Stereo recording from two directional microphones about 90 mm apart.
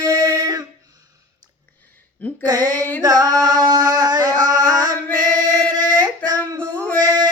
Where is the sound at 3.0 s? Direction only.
40° right (ahead or behind).